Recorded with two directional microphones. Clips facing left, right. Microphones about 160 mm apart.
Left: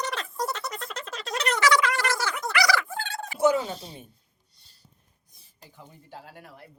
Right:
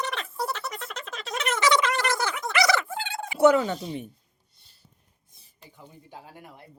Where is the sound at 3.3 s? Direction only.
70° right (ahead or behind).